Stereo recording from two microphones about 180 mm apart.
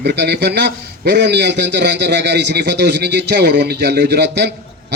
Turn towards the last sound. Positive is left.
turn(degrees=-65)  # may be behind; listen again after turning